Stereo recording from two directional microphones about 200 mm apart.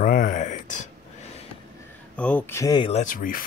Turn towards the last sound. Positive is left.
turn(degrees=45)  # may be behind; listen again after turning